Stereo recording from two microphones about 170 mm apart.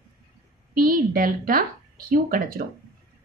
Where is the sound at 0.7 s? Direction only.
55° right (ahead or behind).